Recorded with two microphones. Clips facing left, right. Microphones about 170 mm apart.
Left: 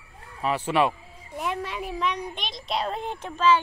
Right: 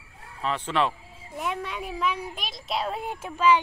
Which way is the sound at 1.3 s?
Centre (ahead or behind).